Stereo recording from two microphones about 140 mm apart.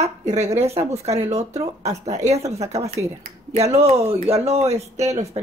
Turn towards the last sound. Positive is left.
turn(degrees=-50)  # may be behind; listen again after turning